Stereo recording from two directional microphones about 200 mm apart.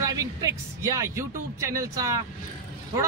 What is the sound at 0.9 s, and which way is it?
A man's voice, 15° right (ahead or behind).